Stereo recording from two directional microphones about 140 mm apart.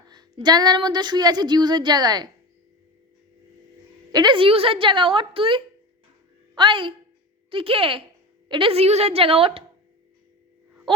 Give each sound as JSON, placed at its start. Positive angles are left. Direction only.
{"t": 0.1, "sound": "speech", "side_deg": -30}
{"t": 4.1, "sound": "a woman's voice", "side_deg": -35}
{"t": 10.9, "sound": "a sound", "side_deg": -35}